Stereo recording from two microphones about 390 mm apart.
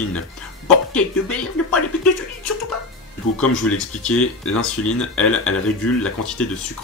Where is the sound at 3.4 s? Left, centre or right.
Centre.